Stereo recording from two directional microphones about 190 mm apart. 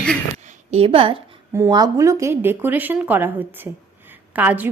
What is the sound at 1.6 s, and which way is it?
A woman's voice, 20° right (ahead or behind).